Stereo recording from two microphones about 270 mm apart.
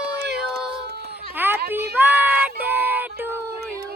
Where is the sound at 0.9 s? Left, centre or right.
Right.